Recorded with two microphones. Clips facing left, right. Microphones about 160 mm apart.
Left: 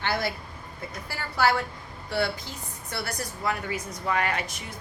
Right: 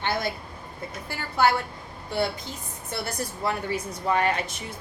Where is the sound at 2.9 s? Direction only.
25° right (ahead or behind).